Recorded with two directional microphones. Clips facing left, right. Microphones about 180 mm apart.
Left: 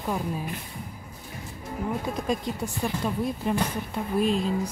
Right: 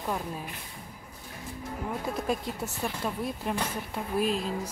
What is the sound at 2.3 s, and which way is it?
Speech, 5° right (ahead or behind).